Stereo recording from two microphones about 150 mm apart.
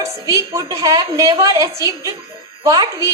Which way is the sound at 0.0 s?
20° right (ahead or behind).